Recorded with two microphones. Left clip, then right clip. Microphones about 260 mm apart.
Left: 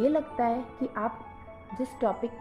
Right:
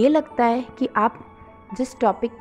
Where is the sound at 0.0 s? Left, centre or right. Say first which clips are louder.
Right 8 dB; right.